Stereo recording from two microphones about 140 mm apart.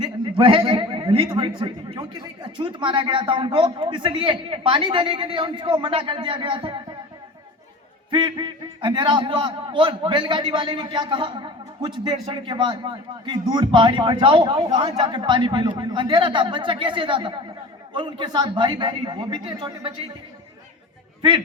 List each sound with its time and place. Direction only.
0.0 s a man's voice: 35° right (ahead or behind)
8.1 s a man's voice: 35° right (ahead or behind)
21.2 s a man's voice: 35° right (ahead or behind)